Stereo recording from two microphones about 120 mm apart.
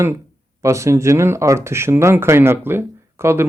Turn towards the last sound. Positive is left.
turn(degrees=-20)  # may be behind; listen again after turning